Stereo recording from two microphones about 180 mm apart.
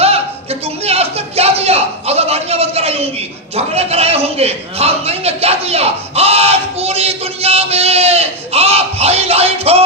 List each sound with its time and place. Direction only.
0.9 s a man's voice: 35° right (ahead or behind)